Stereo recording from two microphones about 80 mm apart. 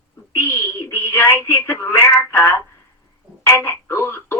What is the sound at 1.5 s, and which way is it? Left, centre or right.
Speech, left.